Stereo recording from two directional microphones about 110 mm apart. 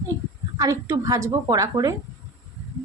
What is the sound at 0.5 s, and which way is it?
Speech, 30° right (ahead or behind).